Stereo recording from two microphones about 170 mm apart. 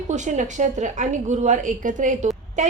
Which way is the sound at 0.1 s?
45° right (ahead or behind).